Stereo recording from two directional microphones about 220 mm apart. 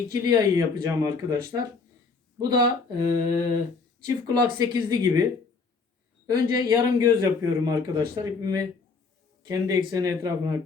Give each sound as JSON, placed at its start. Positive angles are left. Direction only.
{"t": 0.1, "sound": "a man's voice", "side_deg": -15}
{"t": 2.4, "sound": "a man's voice", "side_deg": -20}
{"t": 6.2, "sound": "a man's voice", "side_deg": -15}